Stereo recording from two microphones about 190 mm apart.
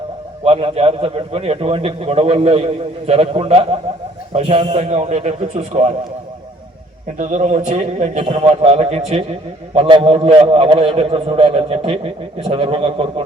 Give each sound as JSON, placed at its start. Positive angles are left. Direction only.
{"t": 0.4, "sound": "a man's voice", "side_deg": -30}
{"t": 7.2, "sound": "a man's voice", "side_deg": -40}